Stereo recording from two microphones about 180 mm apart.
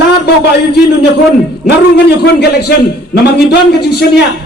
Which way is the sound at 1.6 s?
65° left (ahead or behind).